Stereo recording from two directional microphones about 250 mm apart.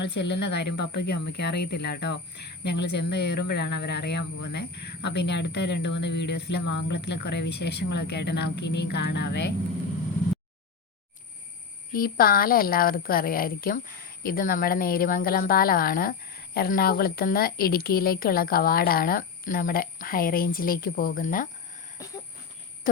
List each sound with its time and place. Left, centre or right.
0.0 s a woman's voice: left
11.9 s a woman's voice: left
21.9 s a sound: centre